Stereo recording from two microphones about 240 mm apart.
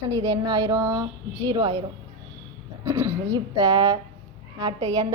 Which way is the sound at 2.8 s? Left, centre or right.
Centre.